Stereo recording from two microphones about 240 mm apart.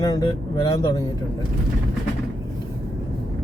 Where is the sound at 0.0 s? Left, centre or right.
Centre.